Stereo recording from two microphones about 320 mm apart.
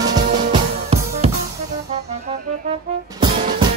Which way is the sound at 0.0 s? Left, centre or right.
Centre.